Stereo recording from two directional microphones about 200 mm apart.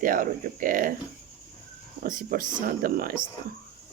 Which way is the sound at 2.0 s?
45° right (ahead or behind).